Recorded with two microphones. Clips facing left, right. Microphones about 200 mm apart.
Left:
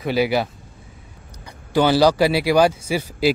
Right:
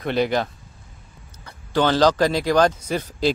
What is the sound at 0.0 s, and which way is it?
A man's voice, 5° left (ahead or behind).